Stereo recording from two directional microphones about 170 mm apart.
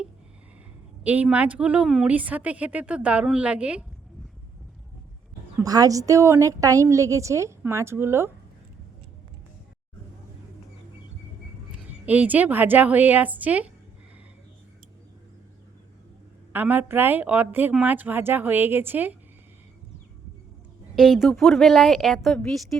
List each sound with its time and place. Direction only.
1.0 s speech: 10° right (ahead or behind)
5.6 s speech: 20° right (ahead or behind)
11.7 s a woman's voice: 10° right (ahead or behind)
16.5 s speech: 10° right (ahead or behind)
20.9 s a woman's voice: centre (ahead or behind)